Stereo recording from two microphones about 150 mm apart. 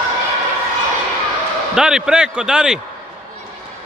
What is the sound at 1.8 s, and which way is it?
Speech, 5° right (ahead or behind).